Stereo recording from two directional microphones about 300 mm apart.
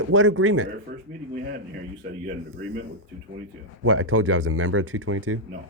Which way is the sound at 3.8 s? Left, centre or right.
Right.